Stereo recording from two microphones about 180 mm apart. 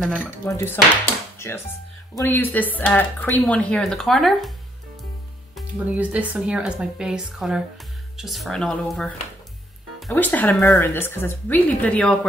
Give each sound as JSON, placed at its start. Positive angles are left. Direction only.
{"t": 0.0, "sound": "a woman's voice", "side_deg": 5}
{"t": 0.5, "sound": "speech", "side_deg": 15}
{"t": 5.9, "sound": "a woman's voice", "side_deg": -10}